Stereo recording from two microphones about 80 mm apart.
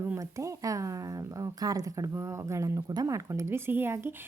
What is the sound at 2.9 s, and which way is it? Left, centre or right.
A woman's voice, right.